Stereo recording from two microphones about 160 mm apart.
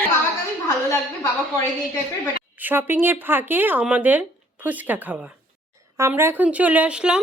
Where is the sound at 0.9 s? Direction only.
15° left (ahead or behind).